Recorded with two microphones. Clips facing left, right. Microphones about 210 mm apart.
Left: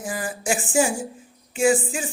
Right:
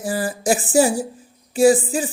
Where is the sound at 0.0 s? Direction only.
35° right (ahead or behind).